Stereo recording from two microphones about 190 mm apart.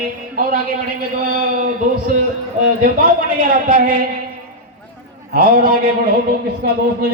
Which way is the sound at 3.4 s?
45° right (ahead or behind).